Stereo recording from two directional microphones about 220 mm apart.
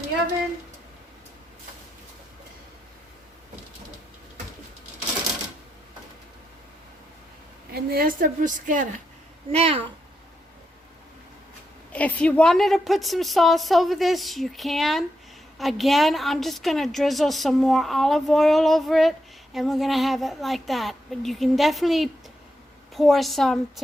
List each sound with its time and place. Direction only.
7.7 s a woman's voice: 45° right (ahead or behind); by 9.8 s 25° right (ahead or behind)
11.9 s a woman's voice: 5° left (ahead or behind)